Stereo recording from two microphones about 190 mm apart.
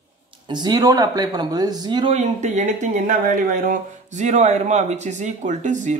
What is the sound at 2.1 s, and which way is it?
Speech, 40° right (ahead or behind).